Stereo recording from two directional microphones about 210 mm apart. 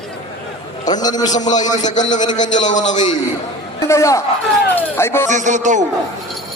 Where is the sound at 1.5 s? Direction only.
35° left (ahead or behind).